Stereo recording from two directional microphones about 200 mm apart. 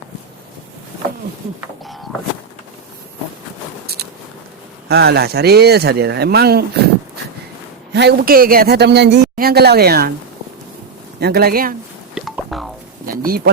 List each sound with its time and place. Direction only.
4.9 s a man's voice: 55° right (ahead or behind)
7.9 s a man's voice: 55° right (ahead or behind)
11.2 s a man's voice: 55° right (ahead or behind)
12.1 s a sound: centre (ahead or behind)
13.1 s pigeon: 45° right (ahead or behind)